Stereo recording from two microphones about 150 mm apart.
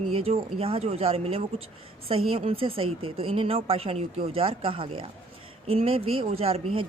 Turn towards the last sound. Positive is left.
turn(degrees=-35)  # may be behind; listen again after turning